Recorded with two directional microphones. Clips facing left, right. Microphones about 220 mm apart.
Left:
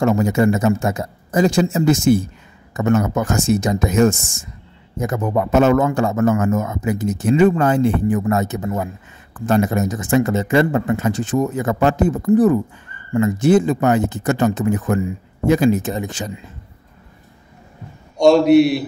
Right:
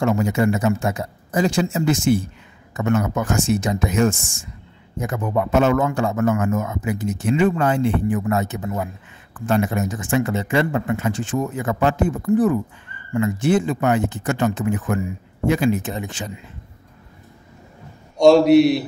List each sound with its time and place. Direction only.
0.0 s a man's voice: 40° left (ahead or behind)
18.1 s a man's voice: centre (ahead or behind)